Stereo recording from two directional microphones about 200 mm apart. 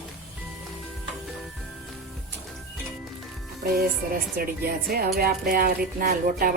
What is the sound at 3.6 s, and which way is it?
Speech, 50° right (ahead or behind).